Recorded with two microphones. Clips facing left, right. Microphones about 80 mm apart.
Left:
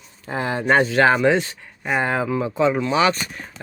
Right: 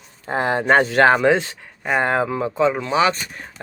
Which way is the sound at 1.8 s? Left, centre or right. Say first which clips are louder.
Right 2 dB; right.